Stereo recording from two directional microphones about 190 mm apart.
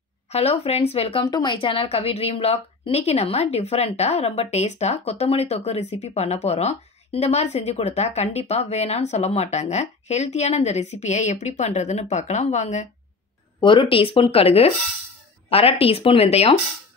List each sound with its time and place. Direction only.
0.3 s speech: 30° left (ahead or behind)
13.6 s speech: 25° left (ahead or behind)